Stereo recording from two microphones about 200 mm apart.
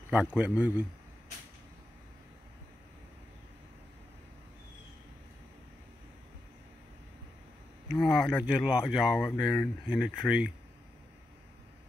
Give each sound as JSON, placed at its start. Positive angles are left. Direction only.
{"t": 0.1, "sound": "a man's voice", "side_deg": -5}
{"t": 7.9, "sound": "speech", "side_deg": 0}